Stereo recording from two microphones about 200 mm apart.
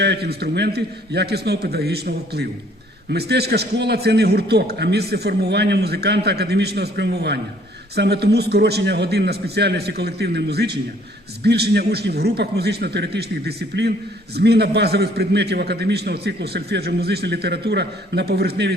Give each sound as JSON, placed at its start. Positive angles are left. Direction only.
{"t": 0.0, "sound": "a man's voice", "side_deg": -55}